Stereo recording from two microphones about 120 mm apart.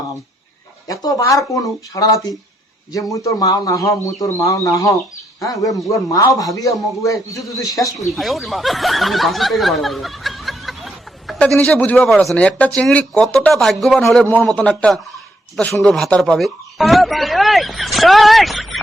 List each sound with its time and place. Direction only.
0.9 s speech: 30° left (ahead or behind)
8.1 s speech: centre (ahead or behind)